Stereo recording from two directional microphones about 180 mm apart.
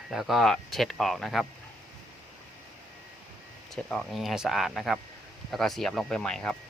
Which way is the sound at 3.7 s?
Centre (ahead or behind).